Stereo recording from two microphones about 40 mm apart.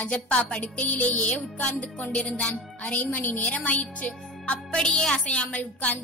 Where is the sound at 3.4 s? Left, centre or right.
Left.